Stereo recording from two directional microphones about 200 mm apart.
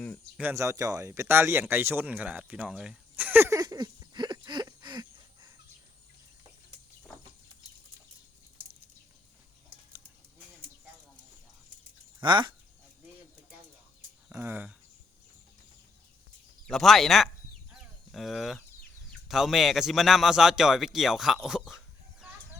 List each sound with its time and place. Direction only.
0.3 s speech: 10° right (ahead or behind)
12.2 s speech: 25° right (ahead or behind)
14.3 s speech: 10° right (ahead or behind)
16.6 s a man's voice: centre (ahead or behind)